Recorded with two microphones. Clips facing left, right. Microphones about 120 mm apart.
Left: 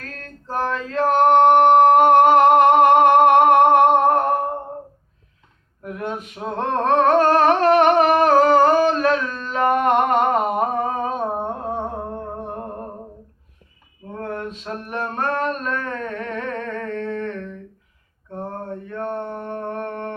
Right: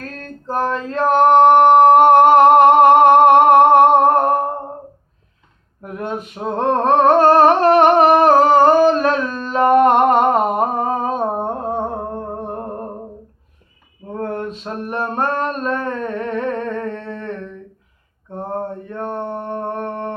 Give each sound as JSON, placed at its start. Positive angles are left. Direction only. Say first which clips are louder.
{"t": 0.0, "sound": "male singing", "louder": "right 6 dB", "side_deg": -35}
{"t": 5.8, "sound": "a sound", "louder": "right 2 dB", "side_deg": -40}
{"t": 6.1, "sound": "male singing", "louder": "right 4 dB", "side_deg": -35}
{"t": 6.5, "sound": "humming", "louder": "right 4 dB", "side_deg": -30}
{"t": 14.1, "sound": "mantra", "louder": "right 5 dB", "side_deg": -35}